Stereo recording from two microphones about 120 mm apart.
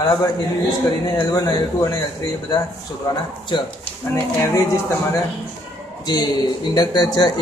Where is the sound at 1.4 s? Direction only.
35° left (ahead or behind).